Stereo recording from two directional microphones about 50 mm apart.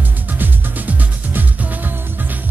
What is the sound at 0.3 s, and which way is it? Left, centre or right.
Music, right.